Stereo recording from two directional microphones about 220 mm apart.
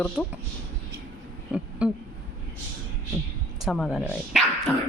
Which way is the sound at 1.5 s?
5° right (ahead or behind).